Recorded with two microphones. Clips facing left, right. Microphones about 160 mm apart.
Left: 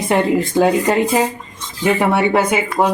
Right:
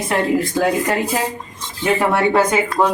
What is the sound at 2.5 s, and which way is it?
Speech, 15° left (ahead or behind).